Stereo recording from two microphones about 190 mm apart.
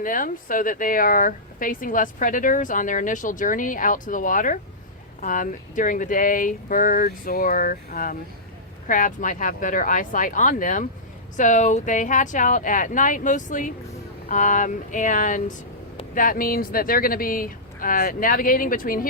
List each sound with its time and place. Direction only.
0.0 s speech: 45° left (ahead or behind)